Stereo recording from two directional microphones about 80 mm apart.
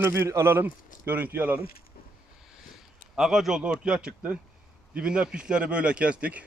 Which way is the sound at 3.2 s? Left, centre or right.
Centre.